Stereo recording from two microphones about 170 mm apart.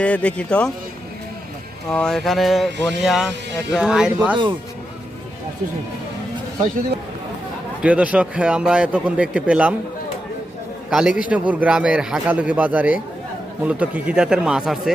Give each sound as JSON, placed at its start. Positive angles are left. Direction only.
{"t": 0.0, "sound": "speech", "side_deg": 10}
{"t": 1.9, "sound": "speech", "side_deg": 5}
{"t": 7.8, "sound": "speech", "side_deg": -5}
{"t": 10.8, "sound": "a man's voice", "side_deg": -5}